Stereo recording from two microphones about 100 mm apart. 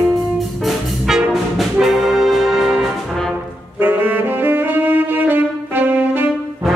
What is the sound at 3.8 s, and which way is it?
Saxophone, 20° right (ahead or behind).